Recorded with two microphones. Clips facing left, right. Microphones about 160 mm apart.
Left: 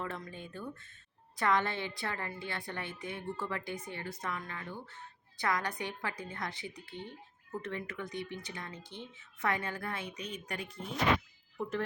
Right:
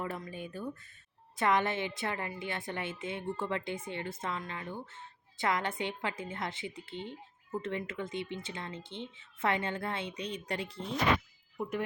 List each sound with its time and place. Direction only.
0.0 s speech: 10° right (ahead or behind); by 10.8 s 30° right (ahead or behind)
11.5 s speech: 15° right (ahead or behind)